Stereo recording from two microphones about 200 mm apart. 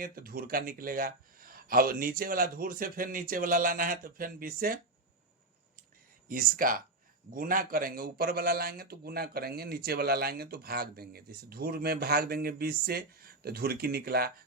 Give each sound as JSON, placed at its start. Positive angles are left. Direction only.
{"t": 0.0, "sound": "a man's voice", "side_deg": -45}
{"t": 6.2, "sound": "a man's voice", "side_deg": -45}